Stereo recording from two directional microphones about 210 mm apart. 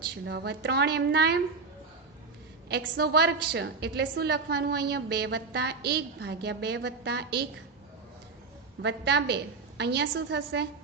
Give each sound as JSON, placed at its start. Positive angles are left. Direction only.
{"t": 0.3, "sound": "a woman's voice", "side_deg": -55}
{"t": 2.6, "sound": "a woman's voice", "side_deg": -50}
{"t": 8.8, "sound": "a woman's voice", "side_deg": -55}